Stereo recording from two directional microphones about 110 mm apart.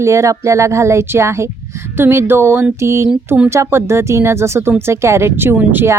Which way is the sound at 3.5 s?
25° right (ahead or behind).